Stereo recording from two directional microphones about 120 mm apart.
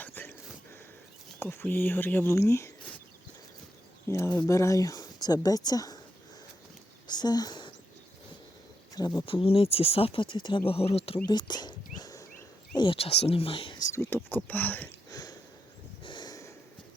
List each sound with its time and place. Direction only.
0.0 s a sound: 15° left (ahead or behind)
1.4 s speech: 20° left (ahead or behind)
4.1 s speech: 20° left (ahead or behind)
7.1 s speech: 35° left (ahead or behind)
9.0 s speech: 30° left (ahead or behind)
9.2 s speech: 50° left (ahead or behind)
10.7 s speech: 55° left (ahead or behind)
11.3 s a sound: 35° left (ahead or behind)
12.7 s speech: 45° left (ahead or behind)
13.8 s speech: 20° left (ahead or behind)
15.1 s sniff: 35° left (ahead or behind)
16.0 s snort: 40° left (ahead or behind)